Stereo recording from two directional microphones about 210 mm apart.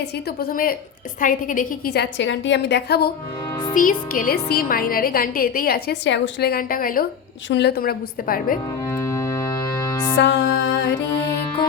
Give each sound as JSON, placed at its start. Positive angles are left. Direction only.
{"t": 0.3, "sound": "a woman's voice", "side_deg": 45}
{"t": 3.8, "sound": "a woman's voice", "side_deg": 40}
{"t": 8.9, "sound": "music", "side_deg": 15}
{"t": 10.2, "sound": "music", "side_deg": 60}